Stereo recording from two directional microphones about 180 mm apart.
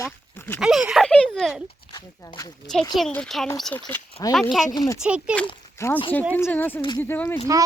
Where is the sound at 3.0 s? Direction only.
5° left (ahead or behind).